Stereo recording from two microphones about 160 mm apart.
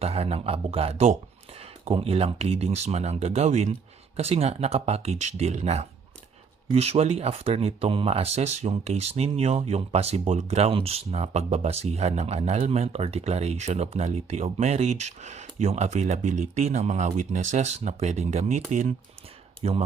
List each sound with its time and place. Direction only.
0.0 s speech: 40° right (ahead or behind)